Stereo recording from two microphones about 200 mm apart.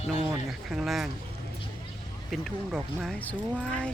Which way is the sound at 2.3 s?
Centre (ahead or behind).